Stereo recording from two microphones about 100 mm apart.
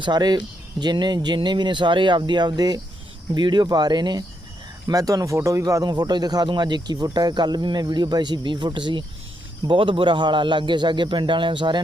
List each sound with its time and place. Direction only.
0.0 s speech: 45° right (ahead or behind)